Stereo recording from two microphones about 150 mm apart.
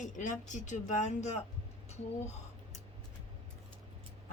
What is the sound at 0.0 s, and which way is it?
Speech, 55° left (ahead or behind).